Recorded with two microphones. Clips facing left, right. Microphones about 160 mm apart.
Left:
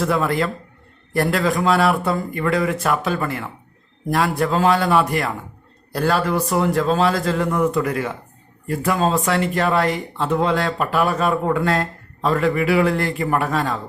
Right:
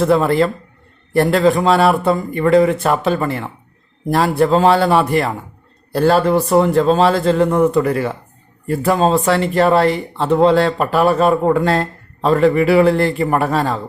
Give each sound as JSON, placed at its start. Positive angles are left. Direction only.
{"t": 0.0, "sound": "speech", "side_deg": -30}